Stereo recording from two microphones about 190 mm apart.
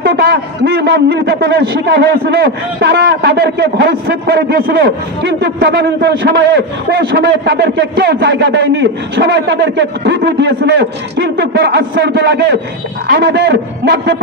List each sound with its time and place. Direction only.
0.0 s a man's voice: 55° right (ahead or behind)